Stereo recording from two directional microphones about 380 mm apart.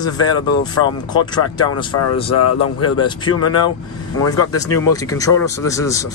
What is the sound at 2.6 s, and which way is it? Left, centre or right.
Speech, centre.